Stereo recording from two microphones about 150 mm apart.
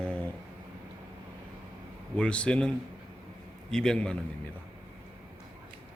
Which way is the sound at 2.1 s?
5° left (ahead or behind).